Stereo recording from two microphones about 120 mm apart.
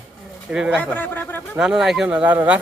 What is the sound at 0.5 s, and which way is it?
Speech, 5° right (ahead or behind).